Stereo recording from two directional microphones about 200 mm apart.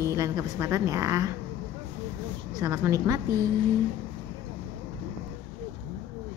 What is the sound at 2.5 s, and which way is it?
Speech, 15° right (ahead or behind).